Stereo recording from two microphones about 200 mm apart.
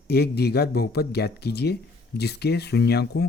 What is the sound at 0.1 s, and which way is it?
Speech, 55° left (ahead or behind).